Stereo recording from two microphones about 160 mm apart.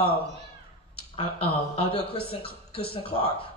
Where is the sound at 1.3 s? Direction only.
35° left (ahead or behind).